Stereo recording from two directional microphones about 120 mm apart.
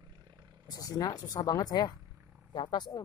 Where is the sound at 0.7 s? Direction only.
30° left (ahead or behind).